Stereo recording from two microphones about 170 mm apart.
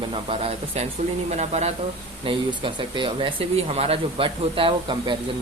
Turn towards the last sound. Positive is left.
turn(degrees=-30)  # may be behind; listen again after turning